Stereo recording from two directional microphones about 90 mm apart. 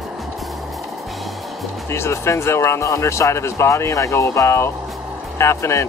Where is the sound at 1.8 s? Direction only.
30° left (ahead or behind).